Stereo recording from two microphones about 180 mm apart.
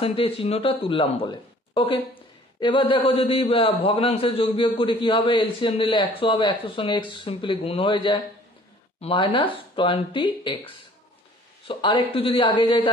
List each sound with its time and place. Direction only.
0.0 s a man's voice: 30° left (ahead or behind)